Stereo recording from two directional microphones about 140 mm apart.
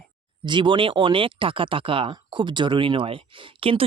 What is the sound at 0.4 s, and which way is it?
Speech, 35° right (ahead or behind).